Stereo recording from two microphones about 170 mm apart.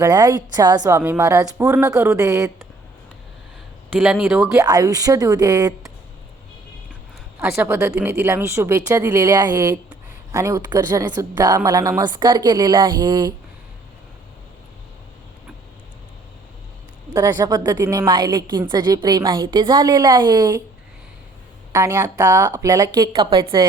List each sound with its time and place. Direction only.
0.0 s speech: 20° right (ahead or behind)
4.0 s speech: centre (ahead or behind)
4.5 s speech: 20° right (ahead or behind)
7.3 s speech: 15° right (ahead or behind)
17.2 s speech: 20° right (ahead or behind)
21.7 s speech: 15° right (ahead or behind)